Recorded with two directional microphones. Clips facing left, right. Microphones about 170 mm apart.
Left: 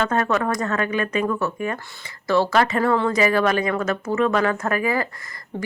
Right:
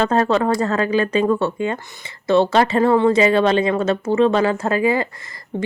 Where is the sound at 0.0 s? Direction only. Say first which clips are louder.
Right 4 dB; 30° right (ahead or behind).